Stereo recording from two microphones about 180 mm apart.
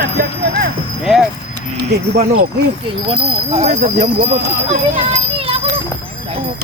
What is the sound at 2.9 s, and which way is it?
Speech, 30° right (ahead or behind).